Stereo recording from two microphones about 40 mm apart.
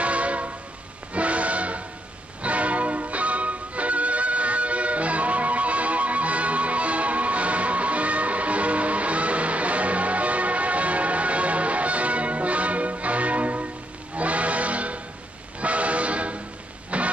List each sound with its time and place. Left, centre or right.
0.0 s music: right
15.6 s train: right
16.9 s printer: right